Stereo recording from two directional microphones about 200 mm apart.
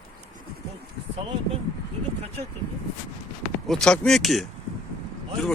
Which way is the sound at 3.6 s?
5° left (ahead or behind).